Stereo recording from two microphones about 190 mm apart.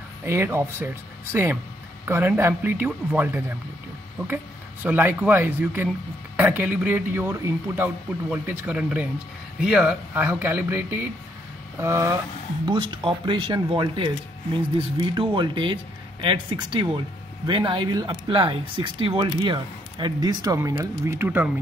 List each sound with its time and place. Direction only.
0.2 s speech: 10° right (ahead or behind)
4.8 s speech: 10° right (ahead or behind); by 14.1 s 25° right (ahead or behind)
15.1 s speech: 25° right (ahead or behind)